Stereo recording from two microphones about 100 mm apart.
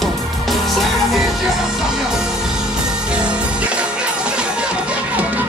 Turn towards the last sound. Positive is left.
turn(degrees=-15)  # may be behind; listen again after turning